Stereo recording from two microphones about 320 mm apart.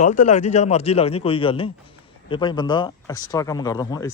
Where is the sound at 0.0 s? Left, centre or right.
Left.